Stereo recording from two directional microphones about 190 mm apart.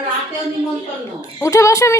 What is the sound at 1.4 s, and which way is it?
Speech, 15° left (ahead or behind).